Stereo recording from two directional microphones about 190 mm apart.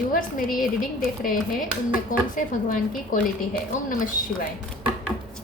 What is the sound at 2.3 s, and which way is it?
Speech, 45° left (ahead or behind).